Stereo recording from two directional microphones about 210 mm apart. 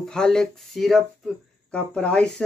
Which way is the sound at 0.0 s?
5° left (ahead or behind).